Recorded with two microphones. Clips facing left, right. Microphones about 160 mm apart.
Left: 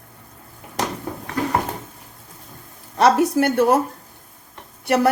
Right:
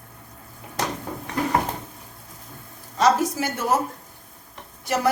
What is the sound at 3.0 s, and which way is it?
Speech, 65° left (ahead or behind).